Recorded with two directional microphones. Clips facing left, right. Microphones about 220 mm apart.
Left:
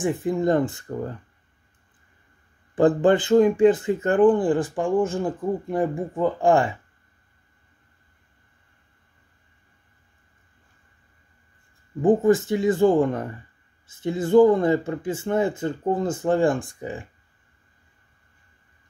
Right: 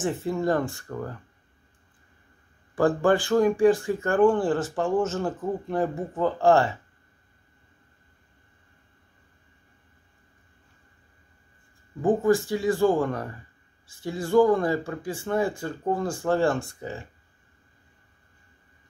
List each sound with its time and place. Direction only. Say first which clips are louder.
0.0 s speech: left 3 dB; 15° left (ahead or behind)
2.7 s speech: left 4 dB; 20° left (ahead or behind)
12.0 s speech: left 3 dB; 20° left (ahead or behind)